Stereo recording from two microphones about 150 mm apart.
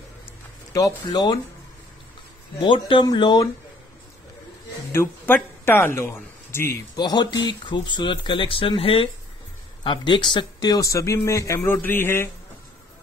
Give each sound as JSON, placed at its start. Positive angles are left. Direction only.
{"t": 0.7, "sound": "a man's voice", "side_deg": 25}
{"t": 2.6, "sound": "speech", "side_deg": 30}
{"t": 4.9, "sound": "speech", "side_deg": 15}
{"t": 7.0, "sound": "a man's voice", "side_deg": 30}